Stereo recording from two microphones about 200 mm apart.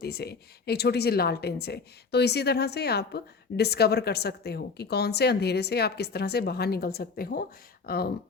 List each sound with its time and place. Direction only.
0.0 s a woman's voice: 50° left (ahead or behind)